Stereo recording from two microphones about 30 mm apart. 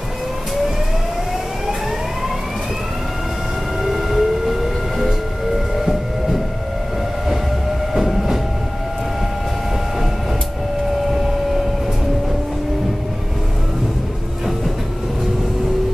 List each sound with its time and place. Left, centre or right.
3.8 s train: centre
5.9 s a sound: centre
7.9 s train: centre